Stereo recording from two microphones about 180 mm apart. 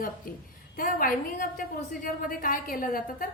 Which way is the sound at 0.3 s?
50° left (ahead or behind).